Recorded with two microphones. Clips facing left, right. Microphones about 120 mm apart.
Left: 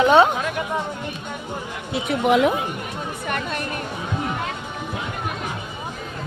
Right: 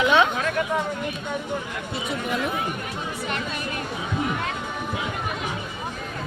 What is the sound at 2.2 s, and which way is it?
Speech, 90° left.